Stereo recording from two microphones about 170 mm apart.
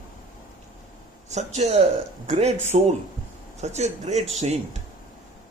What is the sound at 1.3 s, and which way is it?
A man's voice, 40° right (ahead or behind).